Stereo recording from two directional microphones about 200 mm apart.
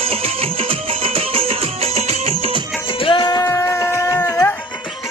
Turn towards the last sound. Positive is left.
turn(degrees=10)  # may be behind; listen again after turning